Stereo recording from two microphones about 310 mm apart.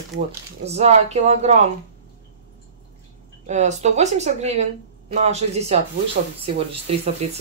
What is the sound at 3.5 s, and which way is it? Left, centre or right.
Speech, right.